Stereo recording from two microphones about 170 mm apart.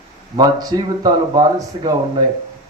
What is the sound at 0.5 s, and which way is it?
Speech, 25° right (ahead or behind).